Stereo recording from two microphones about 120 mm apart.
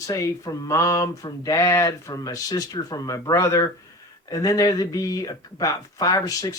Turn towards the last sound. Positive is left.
turn(degrees=30)  # may be behind; listen again after turning